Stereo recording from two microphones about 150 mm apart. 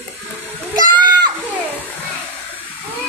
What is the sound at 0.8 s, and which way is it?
Splash, 30° right (ahead or behind).